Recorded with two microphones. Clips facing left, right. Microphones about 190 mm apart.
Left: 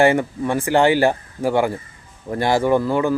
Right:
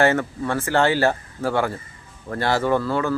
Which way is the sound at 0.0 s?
15° left (ahead or behind).